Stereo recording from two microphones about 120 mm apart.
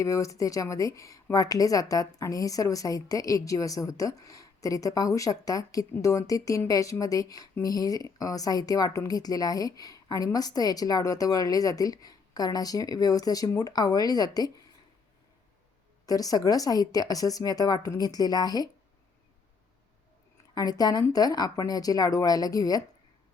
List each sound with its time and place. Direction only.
0.0 s a woman's voice: 25° left (ahead or behind)
16.0 s a woman's voice: 30° left (ahead or behind)
20.6 s a woman's voice: 35° left (ahead or behind)